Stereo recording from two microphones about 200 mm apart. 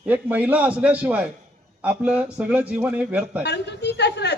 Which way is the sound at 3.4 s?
60° left (ahead or behind).